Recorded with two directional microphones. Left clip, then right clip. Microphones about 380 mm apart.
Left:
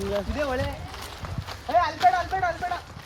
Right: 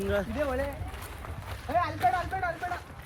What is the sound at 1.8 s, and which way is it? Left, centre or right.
Speech, centre.